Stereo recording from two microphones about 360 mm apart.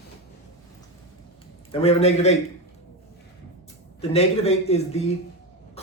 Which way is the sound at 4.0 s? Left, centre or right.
Centre.